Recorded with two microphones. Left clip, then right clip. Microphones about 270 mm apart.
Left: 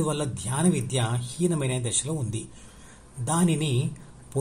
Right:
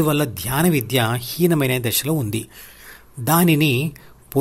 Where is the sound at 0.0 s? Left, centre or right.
Right.